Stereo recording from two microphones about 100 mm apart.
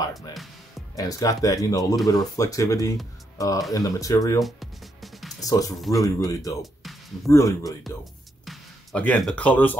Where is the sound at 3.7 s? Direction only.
35° left (ahead or behind).